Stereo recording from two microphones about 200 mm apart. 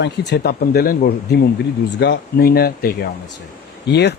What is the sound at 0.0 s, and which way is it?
Speech, 60° left (ahead or behind).